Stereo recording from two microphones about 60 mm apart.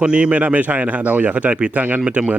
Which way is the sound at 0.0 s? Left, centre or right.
Centre.